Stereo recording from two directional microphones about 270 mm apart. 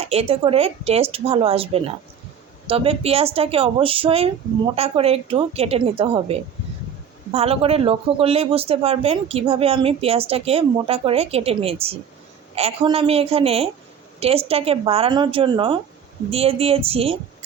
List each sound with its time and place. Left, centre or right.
0.0 s speech: right
7.3 s speech: right